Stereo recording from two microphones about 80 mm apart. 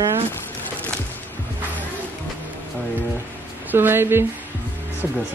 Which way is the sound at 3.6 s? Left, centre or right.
Right.